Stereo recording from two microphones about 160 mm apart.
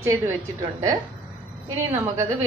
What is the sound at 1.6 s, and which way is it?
Speech, 20° right (ahead or behind).